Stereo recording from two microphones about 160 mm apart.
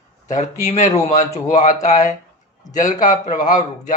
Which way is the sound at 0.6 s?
45° left (ahead or behind).